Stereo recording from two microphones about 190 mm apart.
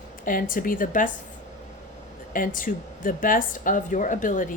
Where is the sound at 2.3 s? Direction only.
45° left (ahead or behind).